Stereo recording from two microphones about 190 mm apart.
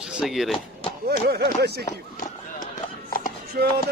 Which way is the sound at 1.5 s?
55° right (ahead or behind).